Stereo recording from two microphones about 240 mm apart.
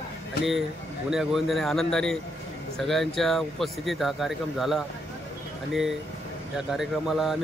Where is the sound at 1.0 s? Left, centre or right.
Centre.